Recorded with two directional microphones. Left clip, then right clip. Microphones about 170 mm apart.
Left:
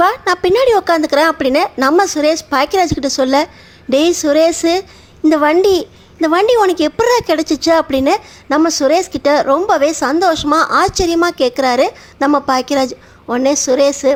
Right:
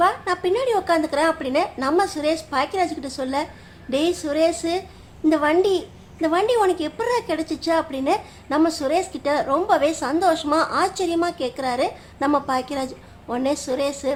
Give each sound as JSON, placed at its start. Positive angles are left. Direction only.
{"t": 0.0, "sound": "a woman's voice", "side_deg": 45}